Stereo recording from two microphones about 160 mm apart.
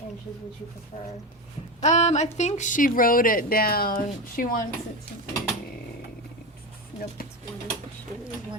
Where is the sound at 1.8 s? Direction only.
45° left (ahead or behind).